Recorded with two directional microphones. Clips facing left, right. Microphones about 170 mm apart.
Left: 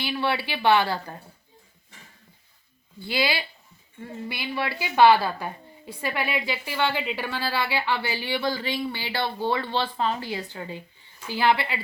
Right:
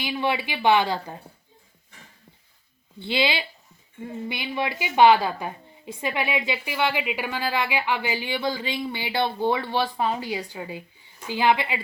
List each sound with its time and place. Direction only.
0.0 s a woman's voice: 15° right (ahead or behind)
3.0 s a woman's voice: 20° right (ahead or behind)